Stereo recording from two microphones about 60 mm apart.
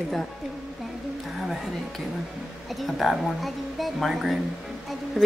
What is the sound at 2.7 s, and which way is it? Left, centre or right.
Speech, centre.